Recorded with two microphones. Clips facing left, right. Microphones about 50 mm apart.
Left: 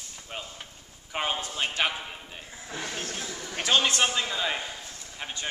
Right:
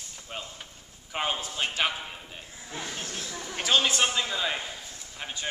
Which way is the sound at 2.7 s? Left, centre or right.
Left.